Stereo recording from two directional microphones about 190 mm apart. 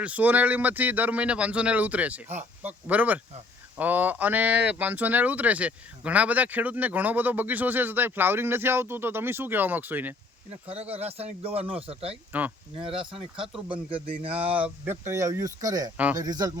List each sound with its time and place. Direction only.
0.0 s speech: 10° right (ahead or behind)
10.9 s speech: 35° right (ahead or behind)
12.3 s speech: 10° right (ahead or behind)
12.8 s speech: 25° right (ahead or behind)
14.5 s speech: 10° right (ahead or behind)